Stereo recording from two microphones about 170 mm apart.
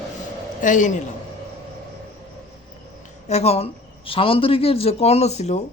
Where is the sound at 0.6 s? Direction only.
50° left (ahead or behind).